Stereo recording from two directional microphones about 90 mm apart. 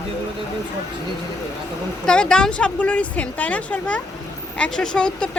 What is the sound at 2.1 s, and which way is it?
A woman's voice, 10° left (ahead or behind).